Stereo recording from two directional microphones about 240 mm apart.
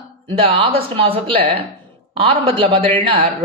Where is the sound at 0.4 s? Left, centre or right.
Right.